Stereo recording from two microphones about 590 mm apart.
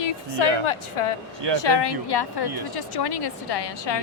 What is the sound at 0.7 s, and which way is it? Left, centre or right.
Speech, left.